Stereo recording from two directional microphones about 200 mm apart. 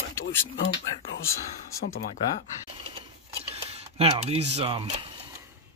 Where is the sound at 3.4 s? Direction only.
30° right (ahead or behind).